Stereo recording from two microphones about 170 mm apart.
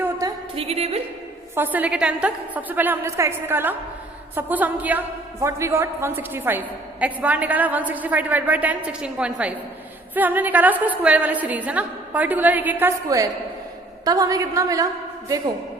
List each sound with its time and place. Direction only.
0.0 s a sound: 20° right (ahead or behind)
0.5 s a woman's voice: 35° right (ahead or behind)
1.5 s a woman's voice: 10° right (ahead or behind)
13.1 s a woman's voice: 20° right (ahead or behind)